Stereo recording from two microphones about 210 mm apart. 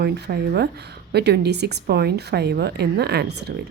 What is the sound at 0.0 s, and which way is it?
A woman's voice, 50° right (ahead or behind).